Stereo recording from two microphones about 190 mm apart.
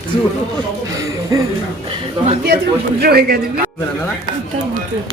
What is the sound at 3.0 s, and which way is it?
Speech, 55° right (ahead or behind).